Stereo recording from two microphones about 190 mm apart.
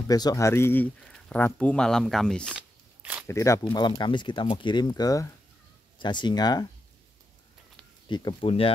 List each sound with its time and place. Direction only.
0.1 s speech: 20° left (ahead or behind); by 2.5 s 5° left (ahead or behind)
2.5 s a sound: 10° right (ahead or behind)
3.3 s speech: 15° left (ahead or behind)
8.1 s speech: 25° left (ahead or behind)